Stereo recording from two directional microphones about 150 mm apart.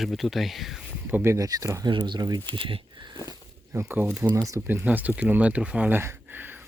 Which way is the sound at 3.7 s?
15° right (ahead or behind).